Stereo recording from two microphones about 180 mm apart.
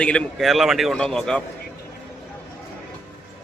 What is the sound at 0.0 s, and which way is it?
A man's voice, 5° left (ahead or behind).